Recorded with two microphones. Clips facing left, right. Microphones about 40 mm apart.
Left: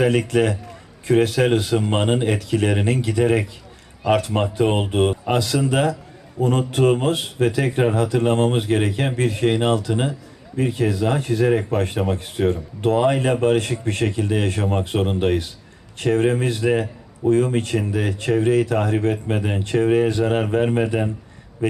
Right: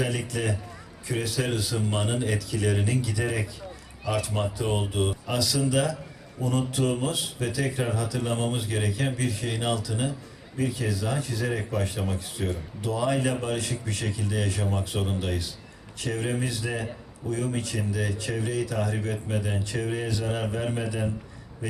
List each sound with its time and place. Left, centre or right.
0.0 s a man's voice: left